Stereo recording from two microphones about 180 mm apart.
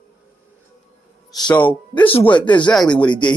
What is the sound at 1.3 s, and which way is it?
A man's voice, 5° left (ahead or behind).